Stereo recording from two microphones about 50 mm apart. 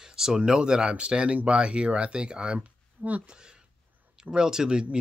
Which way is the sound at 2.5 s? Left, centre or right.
Right.